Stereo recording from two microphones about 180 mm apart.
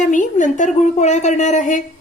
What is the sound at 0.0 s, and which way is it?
A woman's voice, 45° left (ahead or behind).